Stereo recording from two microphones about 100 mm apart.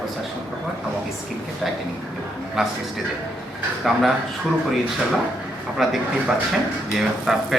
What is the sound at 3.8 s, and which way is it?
Speech, centre (ahead or behind).